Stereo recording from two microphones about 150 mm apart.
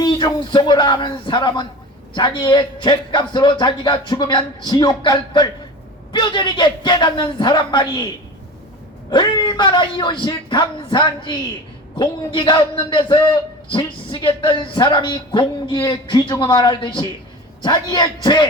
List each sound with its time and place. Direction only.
0.0 s a man's voice: 30° left (ahead or behind)
9.0 s a man's voice: 30° left (ahead or behind)